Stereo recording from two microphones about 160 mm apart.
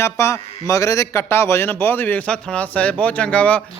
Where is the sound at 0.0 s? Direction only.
15° left (ahead or behind).